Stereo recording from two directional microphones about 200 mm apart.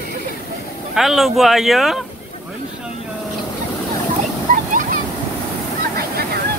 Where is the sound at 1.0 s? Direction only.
Centre (ahead or behind).